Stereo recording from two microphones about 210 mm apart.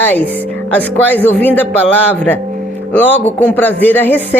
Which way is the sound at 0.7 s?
10° left (ahead or behind).